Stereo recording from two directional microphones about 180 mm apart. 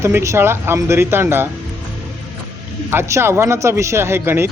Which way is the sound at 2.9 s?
15° right (ahead or behind).